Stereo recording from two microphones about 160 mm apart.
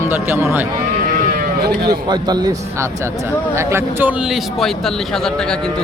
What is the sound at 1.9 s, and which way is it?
A man's voice, 25° right (ahead or behind).